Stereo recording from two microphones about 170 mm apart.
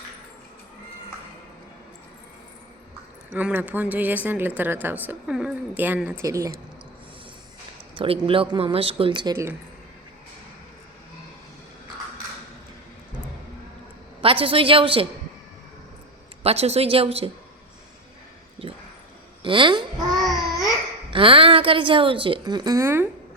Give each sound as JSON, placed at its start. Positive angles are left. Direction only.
{"t": 3.3, "sound": "a woman's voice", "side_deg": -10}
{"t": 7.9, "sound": "a woman's voice", "side_deg": -30}
{"t": 14.2, "sound": "a woman's voice", "side_deg": -30}
{"t": 16.4, "sound": "a woman's voice", "side_deg": -35}
{"t": 18.6, "sound": "a sound", "side_deg": -35}
{"t": 19.4, "sound": "speech", "side_deg": -30}
{"t": 20.1, "sound": "babbling", "side_deg": 0}
{"t": 21.1, "sound": "a woman's voice", "side_deg": -30}